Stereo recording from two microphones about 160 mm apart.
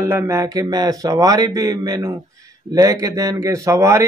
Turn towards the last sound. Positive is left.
turn(degrees=-20)  # may be behind; listen again after turning